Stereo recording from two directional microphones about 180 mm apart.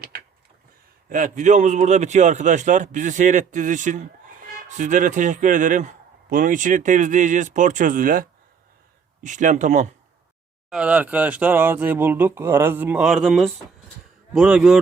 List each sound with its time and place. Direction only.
1.1 s speech: 45° right (ahead or behind)
10.7 s a man's voice: 5° right (ahead or behind)